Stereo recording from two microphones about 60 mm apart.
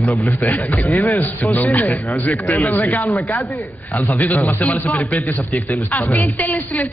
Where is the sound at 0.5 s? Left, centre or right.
Left.